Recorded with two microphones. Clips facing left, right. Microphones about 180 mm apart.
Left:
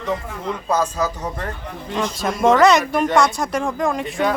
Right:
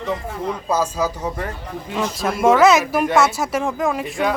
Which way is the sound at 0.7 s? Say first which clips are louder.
Left 1 dB; 10° right (ahead or behind).